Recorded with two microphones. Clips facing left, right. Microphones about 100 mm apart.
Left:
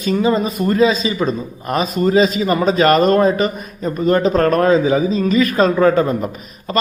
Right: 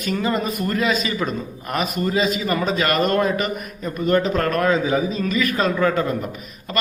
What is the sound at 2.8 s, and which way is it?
A man's voice, 35° left (ahead or behind).